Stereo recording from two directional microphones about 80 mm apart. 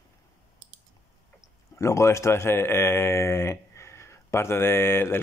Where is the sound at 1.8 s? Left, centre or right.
Left.